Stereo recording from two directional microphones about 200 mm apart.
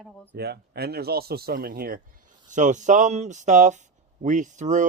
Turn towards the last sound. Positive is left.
turn(degrees=-40)  # may be behind; listen again after turning